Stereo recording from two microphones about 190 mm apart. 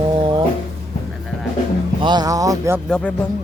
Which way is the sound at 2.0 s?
25° right (ahead or behind).